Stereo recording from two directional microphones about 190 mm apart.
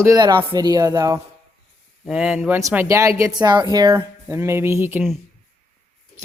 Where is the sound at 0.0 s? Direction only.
20° right (ahead or behind).